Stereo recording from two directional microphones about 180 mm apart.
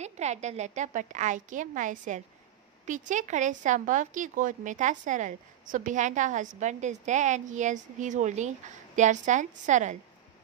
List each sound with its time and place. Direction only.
0.0 s speech: 40° right (ahead or behind)